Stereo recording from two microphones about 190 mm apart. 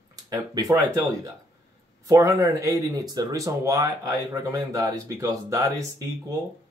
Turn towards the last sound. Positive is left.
turn(degrees=-15)  # may be behind; listen again after turning